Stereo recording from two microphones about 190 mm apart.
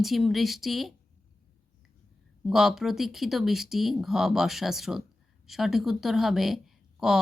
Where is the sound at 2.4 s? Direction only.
Centre (ahead or behind).